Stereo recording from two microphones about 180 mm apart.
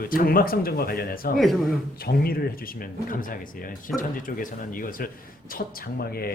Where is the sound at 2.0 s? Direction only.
60° left (ahead or behind).